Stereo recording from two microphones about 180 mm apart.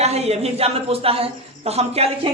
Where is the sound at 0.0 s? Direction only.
35° right (ahead or behind).